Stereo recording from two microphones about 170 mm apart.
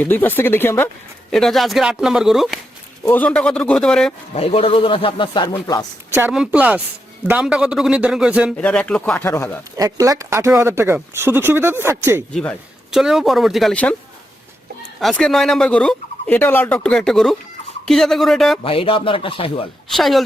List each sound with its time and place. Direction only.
0.0 s speech: 10° left (ahead or behind)
1.3 s speech: centre (ahead or behind)
3.0 s speech: 10° left (ahead or behind)
4.4 s speech: 35° left (ahead or behind)
6.1 s speech: 15° right (ahead or behind)
8.5 s speech: 5° left (ahead or behind)
9.7 s speech: 20° right (ahead or behind)
12.3 s speech: 5° left (ahead or behind)
15.0 s speech: centre (ahead or behind)
18.6 s speech: 30° left (ahead or behind)
19.9 s speech: centre (ahead or behind)